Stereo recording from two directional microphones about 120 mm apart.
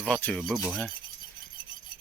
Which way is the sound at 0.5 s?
10° right (ahead or behind).